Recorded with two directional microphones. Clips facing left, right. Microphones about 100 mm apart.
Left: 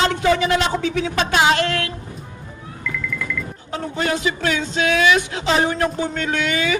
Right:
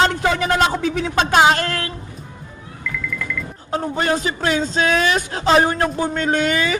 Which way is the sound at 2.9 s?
Centre (ahead or behind).